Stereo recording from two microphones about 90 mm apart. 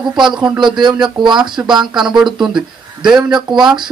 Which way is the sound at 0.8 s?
55° right (ahead or behind).